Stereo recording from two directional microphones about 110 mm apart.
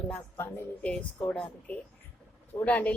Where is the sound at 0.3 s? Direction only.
20° left (ahead or behind).